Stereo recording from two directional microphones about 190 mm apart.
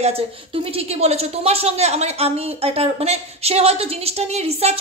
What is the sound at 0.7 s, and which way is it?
A woman's voice, 30° right (ahead or behind).